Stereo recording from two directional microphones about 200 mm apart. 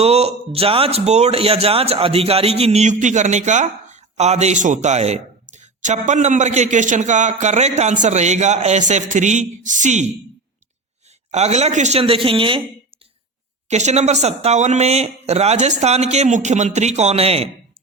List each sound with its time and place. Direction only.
0.0 s a man's voice: 30° right (ahead or behind)
11.3 s a man's voice: 35° right (ahead or behind)
13.7 s a man's voice: 35° right (ahead or behind)